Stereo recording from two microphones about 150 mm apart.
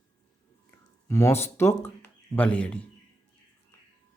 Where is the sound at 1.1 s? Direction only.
20° left (ahead or behind).